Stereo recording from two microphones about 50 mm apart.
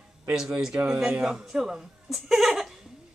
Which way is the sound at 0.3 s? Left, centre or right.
Centre.